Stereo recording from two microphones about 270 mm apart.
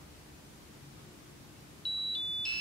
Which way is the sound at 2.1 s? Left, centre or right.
Centre.